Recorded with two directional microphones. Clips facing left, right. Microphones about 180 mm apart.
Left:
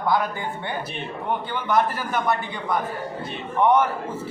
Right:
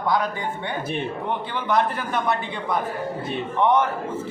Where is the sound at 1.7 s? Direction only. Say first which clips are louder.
Even; centre (ahead or behind).